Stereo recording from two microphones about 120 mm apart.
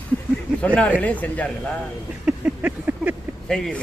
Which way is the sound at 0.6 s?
10° left (ahead or behind).